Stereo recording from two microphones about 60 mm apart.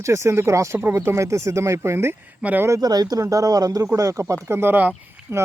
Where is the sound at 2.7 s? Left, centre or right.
Right.